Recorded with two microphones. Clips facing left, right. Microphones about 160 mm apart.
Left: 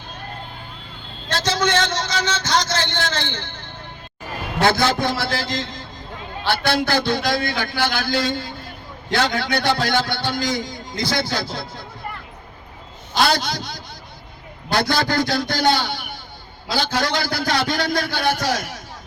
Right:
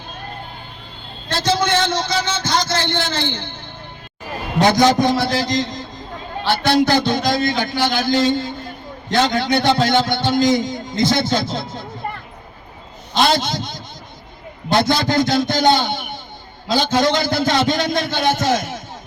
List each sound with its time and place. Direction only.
1.3 s a man's voice: 10° right (ahead or behind)
13.1 s a man's voice: 20° right (ahead or behind)